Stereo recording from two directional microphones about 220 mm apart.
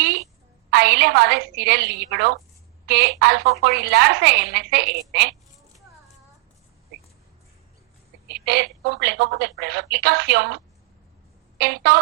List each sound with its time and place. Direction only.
0.7 s a woman's voice: 50° right (ahead or behind)
8.3 s a woman's voice: 50° right (ahead or behind)